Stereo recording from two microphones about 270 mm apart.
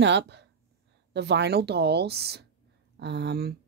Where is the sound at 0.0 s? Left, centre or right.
Right.